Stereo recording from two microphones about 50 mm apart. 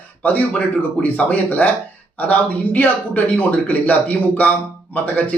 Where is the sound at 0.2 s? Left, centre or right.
Left.